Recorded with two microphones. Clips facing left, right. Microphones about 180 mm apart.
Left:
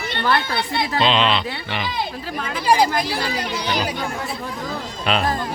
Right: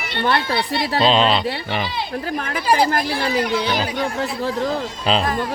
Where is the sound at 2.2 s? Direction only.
60° right (ahead or behind).